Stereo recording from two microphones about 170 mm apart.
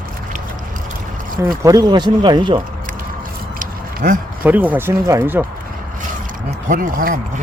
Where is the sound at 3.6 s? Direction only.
50° right (ahead or behind).